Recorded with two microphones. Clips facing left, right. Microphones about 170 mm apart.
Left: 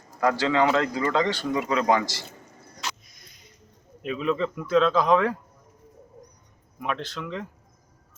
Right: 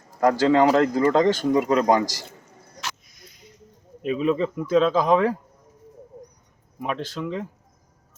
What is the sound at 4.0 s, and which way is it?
Speech, 40° right (ahead or behind).